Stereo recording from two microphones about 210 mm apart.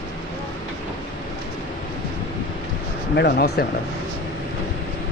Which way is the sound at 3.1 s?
50° left (ahead or behind).